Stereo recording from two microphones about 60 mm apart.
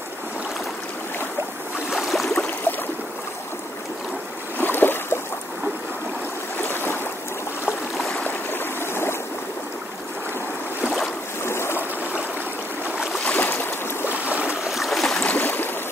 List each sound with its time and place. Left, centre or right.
2.0 s a sound: centre
2.3 s a sound: left
4.6 s boat: left
6.6 s boat: left
8.5 s stream: left
11.4 s stream: left
13.4 s boat: left
14.0 s stream: right
14.7 s boat: centre
15.1 s boat: left
15.4 s a sound: left